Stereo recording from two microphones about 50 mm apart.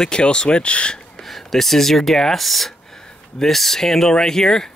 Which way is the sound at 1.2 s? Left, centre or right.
Centre.